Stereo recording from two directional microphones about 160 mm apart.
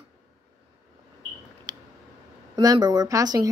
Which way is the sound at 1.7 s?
25° right (ahead or behind).